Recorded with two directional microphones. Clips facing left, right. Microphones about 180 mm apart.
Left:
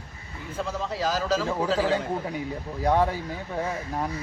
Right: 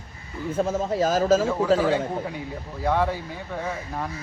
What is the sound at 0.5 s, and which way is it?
Speech, 45° right (ahead or behind).